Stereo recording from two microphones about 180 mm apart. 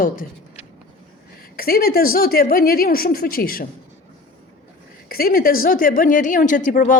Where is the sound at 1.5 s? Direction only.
55° left (ahead or behind).